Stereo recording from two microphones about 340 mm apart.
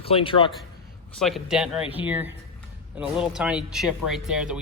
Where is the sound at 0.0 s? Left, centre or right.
Centre.